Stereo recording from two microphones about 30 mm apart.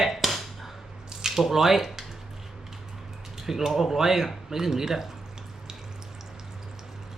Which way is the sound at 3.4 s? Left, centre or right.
Centre.